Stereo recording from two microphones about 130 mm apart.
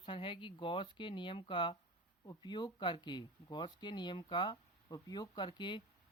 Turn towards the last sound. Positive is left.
turn(degrees=35)  # may be behind; listen again after turning